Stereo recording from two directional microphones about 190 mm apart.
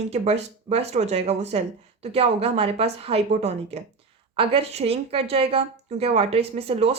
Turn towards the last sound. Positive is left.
turn(degrees=-30)  # may be behind; listen again after turning